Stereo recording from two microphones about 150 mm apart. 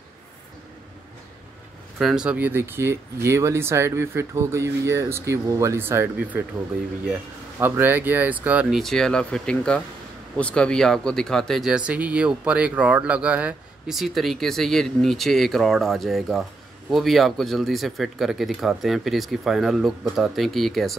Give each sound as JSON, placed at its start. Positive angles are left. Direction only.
{"t": 2.0, "sound": "speech", "side_deg": -5}